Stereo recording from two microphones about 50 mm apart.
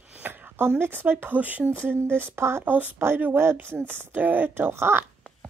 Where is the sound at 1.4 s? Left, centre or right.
Right.